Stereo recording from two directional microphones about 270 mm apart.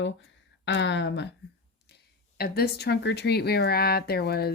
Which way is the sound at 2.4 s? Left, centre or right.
Left.